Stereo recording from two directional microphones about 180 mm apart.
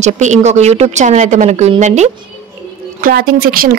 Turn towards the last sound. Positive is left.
turn(degrees=-55)  # may be behind; listen again after turning